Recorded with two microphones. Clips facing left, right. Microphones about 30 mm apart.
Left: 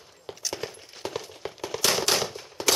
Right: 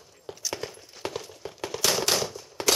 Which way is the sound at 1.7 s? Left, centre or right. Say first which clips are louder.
Left 1 dB; centre.